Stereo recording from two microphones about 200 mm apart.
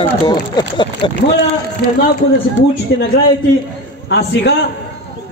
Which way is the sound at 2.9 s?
65° left (ahead or behind).